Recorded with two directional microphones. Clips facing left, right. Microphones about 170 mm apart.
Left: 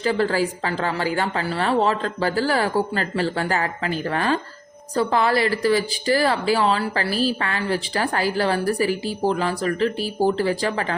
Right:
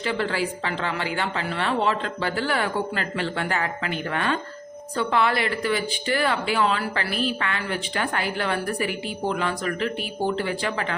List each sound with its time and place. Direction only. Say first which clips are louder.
0.0 s speech: left 5 dB; 40° left (ahead or behind)